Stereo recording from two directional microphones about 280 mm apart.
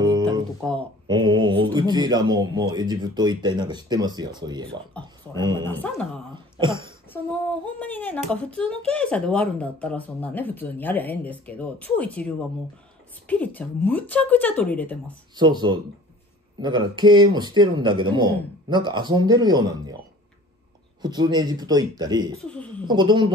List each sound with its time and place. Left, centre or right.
0.0 s a sound: centre
0.6 s speech: centre
1.0 s speech: centre
5.7 s speech: centre
6.3 s throat clearing: centre
7.8 s a woman's voice: centre
15.3 s speech: centre
21.0 s speech: centre
22.4 s a woman's voice: centre
22.8 s speech: centre